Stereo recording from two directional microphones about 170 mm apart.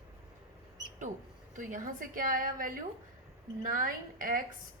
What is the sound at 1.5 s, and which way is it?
A woman's voice, 50° right (ahead or behind).